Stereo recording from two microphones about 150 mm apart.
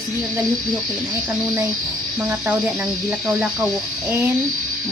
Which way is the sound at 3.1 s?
Centre (ahead or behind).